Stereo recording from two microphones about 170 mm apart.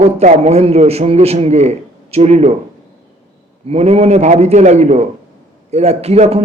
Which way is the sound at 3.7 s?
40° right (ahead or behind).